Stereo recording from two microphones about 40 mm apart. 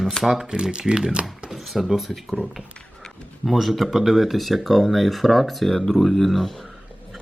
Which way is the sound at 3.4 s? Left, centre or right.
Centre.